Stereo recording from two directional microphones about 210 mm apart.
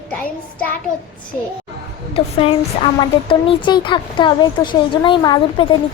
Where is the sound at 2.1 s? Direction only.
25° left (ahead or behind).